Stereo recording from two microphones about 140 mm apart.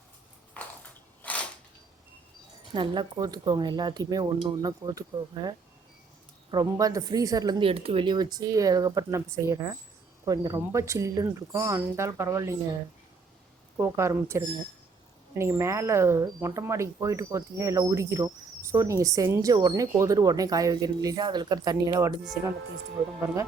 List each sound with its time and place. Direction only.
1.2 s a sound: 10° left (ahead or behind)
2.7 s speech: 35° right (ahead or behind)
7.7 s speech: 40° right (ahead or behind); by 12.5 s 20° right (ahead or behind)
13.7 s speech: 20° right (ahead or behind)